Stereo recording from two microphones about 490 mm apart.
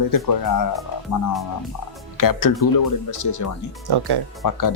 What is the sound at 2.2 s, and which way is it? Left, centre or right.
Speech, left.